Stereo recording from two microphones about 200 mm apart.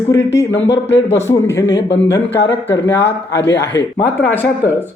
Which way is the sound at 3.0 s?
60° left (ahead or behind).